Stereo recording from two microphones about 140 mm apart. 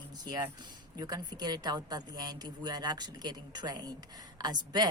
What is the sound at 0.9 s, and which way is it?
Speech, 30° right (ahead or behind).